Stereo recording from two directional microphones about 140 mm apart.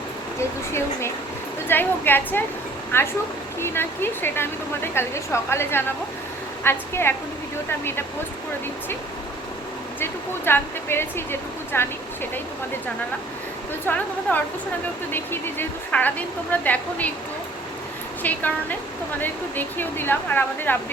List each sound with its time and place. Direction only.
0.3 s speech: 20° left (ahead or behind)
10.0 s speech: 15° left (ahead or behind)
13.8 s speech: 10° left (ahead or behind)
18.2 s speech: 10° left (ahead or behind)